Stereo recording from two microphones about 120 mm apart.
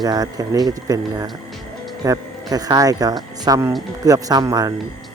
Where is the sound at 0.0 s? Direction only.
35° right (ahead or behind).